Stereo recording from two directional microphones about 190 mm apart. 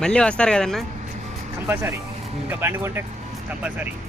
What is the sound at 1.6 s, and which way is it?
Speech, 10° right (ahead or behind).